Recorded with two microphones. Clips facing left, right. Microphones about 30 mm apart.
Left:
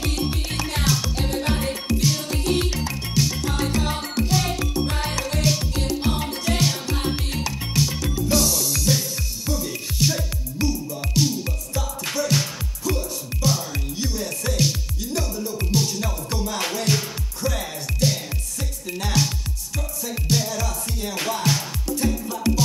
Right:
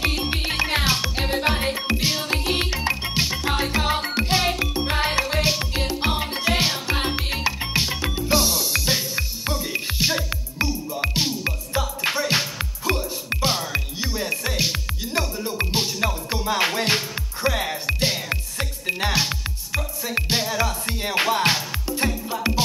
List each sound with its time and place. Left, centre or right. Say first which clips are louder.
0.0 s music: right 2 dB; right